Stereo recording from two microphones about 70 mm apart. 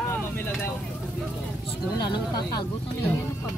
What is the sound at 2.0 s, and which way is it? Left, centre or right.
Speech, left.